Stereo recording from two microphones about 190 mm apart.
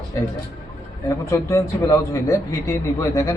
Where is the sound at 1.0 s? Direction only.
15° left (ahead or behind).